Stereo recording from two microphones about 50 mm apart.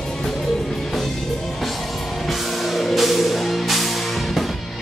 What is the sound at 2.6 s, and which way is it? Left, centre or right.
Music, centre.